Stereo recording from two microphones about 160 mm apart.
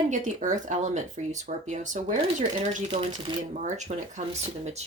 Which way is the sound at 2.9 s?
30° right (ahead or behind).